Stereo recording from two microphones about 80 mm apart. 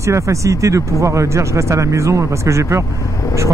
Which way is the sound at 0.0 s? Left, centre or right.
Right.